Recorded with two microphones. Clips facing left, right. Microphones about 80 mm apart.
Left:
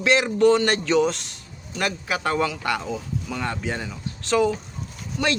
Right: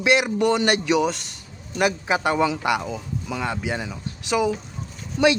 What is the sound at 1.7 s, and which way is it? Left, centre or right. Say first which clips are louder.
A man's voice: right 5 dB; centre.